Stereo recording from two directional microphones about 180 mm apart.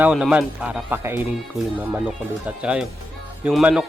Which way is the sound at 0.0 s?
5° right (ahead or behind).